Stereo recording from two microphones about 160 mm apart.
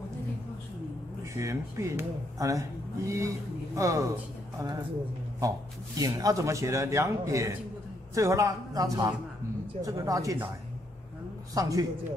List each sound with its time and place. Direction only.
1.3 s a man's voice: 20° right (ahead or behind)
5.4 s a man's voice: 20° right (ahead or behind)
11.5 s a man's voice: 20° right (ahead or behind)